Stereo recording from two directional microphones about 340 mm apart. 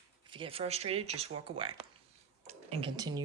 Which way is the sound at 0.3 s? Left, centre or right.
Centre.